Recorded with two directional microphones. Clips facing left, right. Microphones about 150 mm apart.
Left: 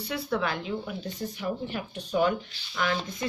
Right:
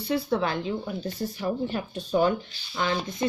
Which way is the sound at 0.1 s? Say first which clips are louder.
Right 4 dB; 30° right (ahead or behind).